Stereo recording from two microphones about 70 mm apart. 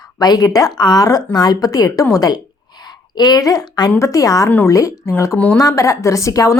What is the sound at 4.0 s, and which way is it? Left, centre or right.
A woman's voice, left.